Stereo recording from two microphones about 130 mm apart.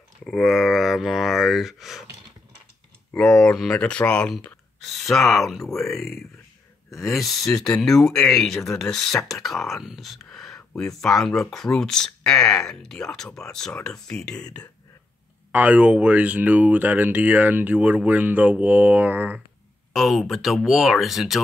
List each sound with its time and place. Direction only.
0.2 s speech: centre (ahead or behind)
3.1 s speech: 5° left (ahead or behind)
15.5 s speech: 10° right (ahead or behind)
19.9 s speech: centre (ahead or behind)